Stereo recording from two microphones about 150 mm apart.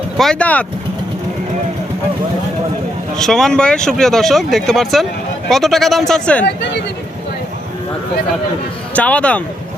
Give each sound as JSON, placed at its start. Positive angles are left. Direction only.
{"t": 0.2, "sound": "speech", "side_deg": 5}
{"t": 3.2, "sound": "speech", "side_deg": 5}
{"t": 6.4, "sound": "speech", "side_deg": 90}
{"t": 9.0, "sound": "speech", "side_deg": 10}